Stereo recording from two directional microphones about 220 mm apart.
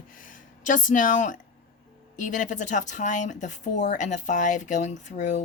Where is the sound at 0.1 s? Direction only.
35° left (ahead or behind).